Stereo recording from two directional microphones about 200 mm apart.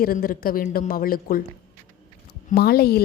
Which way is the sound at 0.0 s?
45° left (ahead or behind).